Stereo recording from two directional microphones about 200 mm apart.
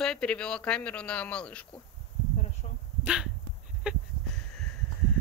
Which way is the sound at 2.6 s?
30° left (ahead or behind).